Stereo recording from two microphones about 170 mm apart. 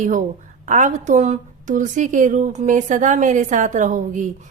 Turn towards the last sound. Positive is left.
turn(degrees=-45)  # may be behind; listen again after turning